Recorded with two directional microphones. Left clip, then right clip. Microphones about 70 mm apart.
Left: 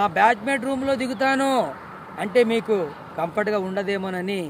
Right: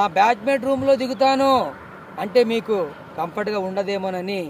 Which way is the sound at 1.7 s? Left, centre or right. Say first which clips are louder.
Even; left.